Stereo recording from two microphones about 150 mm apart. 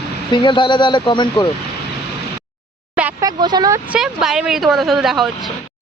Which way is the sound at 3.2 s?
30° right (ahead or behind).